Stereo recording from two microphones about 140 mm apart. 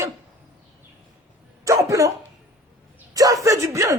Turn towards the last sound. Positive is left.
turn(degrees=-20)  # may be behind; listen again after turning